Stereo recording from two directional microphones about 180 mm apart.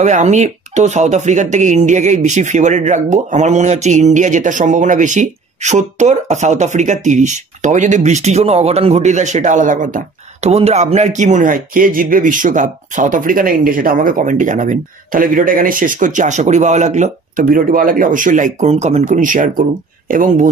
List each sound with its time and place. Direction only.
0.0 s speech: 40° right (ahead or behind)